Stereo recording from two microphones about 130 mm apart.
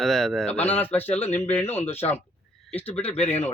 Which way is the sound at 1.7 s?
15° left (ahead or behind).